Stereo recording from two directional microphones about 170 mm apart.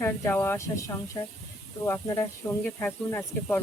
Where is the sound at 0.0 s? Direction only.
10° left (ahead or behind).